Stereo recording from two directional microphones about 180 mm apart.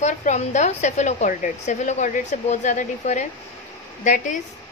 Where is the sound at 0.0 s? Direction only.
40° left (ahead or behind).